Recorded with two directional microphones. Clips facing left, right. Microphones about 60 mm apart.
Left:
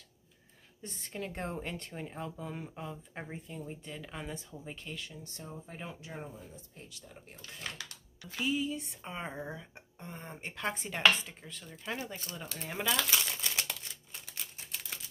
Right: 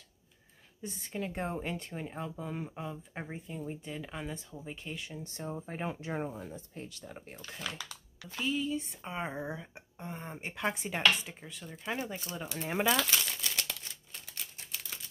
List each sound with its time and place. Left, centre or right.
0.8 s speech: centre
4.8 s speech: centre; by 7.3 s right
8.4 s speech: centre; by 12.9 s right
13.1 s crumpling: centre